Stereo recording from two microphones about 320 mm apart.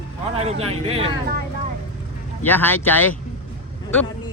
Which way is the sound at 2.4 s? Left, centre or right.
Centre.